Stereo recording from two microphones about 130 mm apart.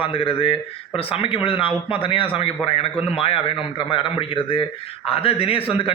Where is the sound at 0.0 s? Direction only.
45° left (ahead or behind).